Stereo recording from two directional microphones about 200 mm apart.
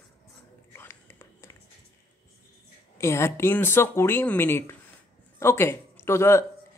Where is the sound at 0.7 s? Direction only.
10° left (ahead or behind).